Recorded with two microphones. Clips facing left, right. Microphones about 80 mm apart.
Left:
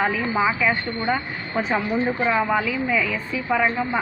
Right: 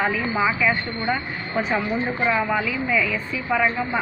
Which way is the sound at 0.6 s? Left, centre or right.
Left.